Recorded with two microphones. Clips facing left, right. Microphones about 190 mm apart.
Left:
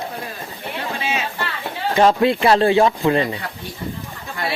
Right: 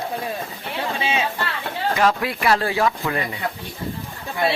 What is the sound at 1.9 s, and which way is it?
Speech, 30° left (ahead or behind).